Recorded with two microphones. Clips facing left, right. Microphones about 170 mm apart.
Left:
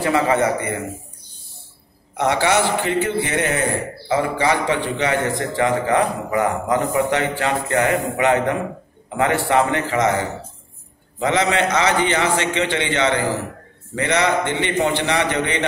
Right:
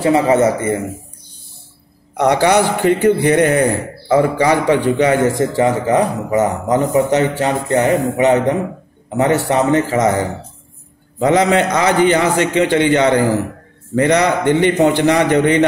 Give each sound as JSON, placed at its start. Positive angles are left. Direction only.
{"t": 0.0, "sound": "a man's voice", "side_deg": -20}
{"t": 2.4, "sound": "a man's voice", "side_deg": -40}
{"t": 5.6, "sound": "a man's voice", "side_deg": -30}
{"t": 9.5, "sound": "a man's voice", "side_deg": -40}
{"t": 11.1, "sound": "a man's voice", "side_deg": -45}